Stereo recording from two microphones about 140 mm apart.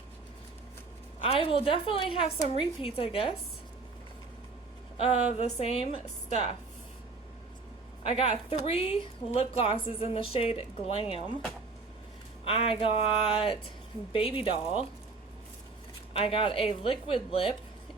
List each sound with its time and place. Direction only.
1.2 s a woman's voice: 40° left (ahead or behind)
4.9 s a woman's voice: 50° left (ahead or behind)
8.0 s a woman's voice: 45° left (ahead or behind)
12.5 s a woman's voice: 40° left (ahead or behind)
16.1 s speech: 40° left (ahead or behind)